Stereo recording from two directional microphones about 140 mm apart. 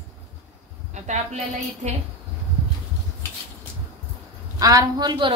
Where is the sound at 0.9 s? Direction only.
55° right (ahead or behind).